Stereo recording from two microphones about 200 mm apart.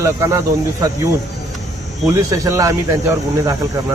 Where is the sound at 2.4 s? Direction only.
15° right (ahead or behind).